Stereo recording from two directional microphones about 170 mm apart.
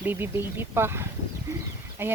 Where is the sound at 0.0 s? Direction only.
10° right (ahead or behind).